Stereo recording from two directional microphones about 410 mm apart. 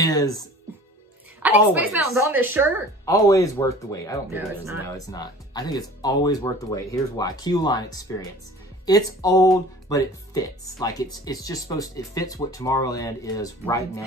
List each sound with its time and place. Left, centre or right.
0.0 s speech: centre
1.4 s a woman's voice: centre
3.1 s speech: centre